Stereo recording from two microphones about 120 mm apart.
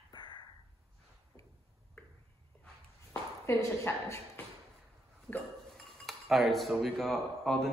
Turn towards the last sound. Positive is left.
turn(degrees=5)  # may be behind; listen again after turning